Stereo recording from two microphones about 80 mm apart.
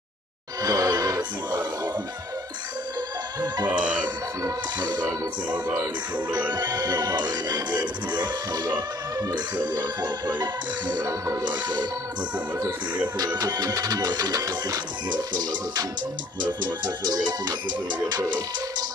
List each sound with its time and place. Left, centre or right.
0.6 s music: right
3.6 s speech: centre
4.4 s music: right
13.2 s music: right
15.0 s music: right